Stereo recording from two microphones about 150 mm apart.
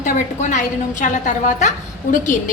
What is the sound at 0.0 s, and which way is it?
A woman's voice, 55° left (ahead or behind).